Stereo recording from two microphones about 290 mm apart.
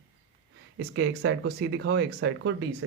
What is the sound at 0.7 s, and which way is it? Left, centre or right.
Speech, right.